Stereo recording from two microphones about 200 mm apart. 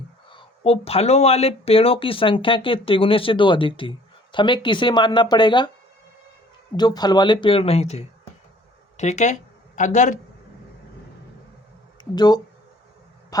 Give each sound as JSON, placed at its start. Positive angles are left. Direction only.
{"t": 0.3, "sound": "speech", "side_deg": 30}
{"t": 6.7, "sound": "speech", "side_deg": 20}
{"t": 12.1, "sound": "speech", "side_deg": 20}
{"t": 13.3, "sound": "a sound", "side_deg": 20}